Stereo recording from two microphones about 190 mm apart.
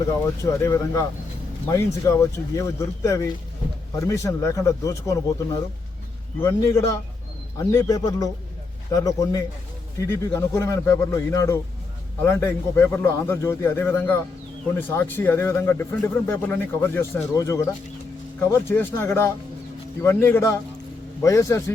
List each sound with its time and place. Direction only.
0.4 s speech: 15° left (ahead or behind)
6.4 s speech: 15° left (ahead or behind)